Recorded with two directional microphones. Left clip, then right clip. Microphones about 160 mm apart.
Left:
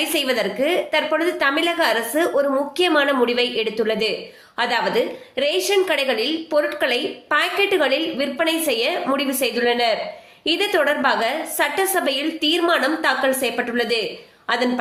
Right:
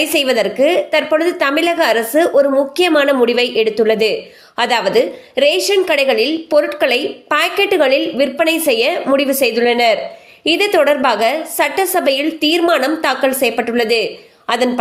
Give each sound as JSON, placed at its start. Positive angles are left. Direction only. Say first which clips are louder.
{"t": 0.0, "sound": "a woman's voice", "louder": "right 6 dB", "side_deg": -35}